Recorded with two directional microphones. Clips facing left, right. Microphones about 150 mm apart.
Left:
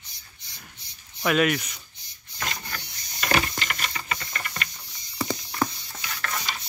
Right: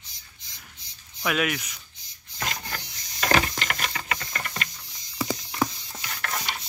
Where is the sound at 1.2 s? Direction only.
Centre (ahead or behind).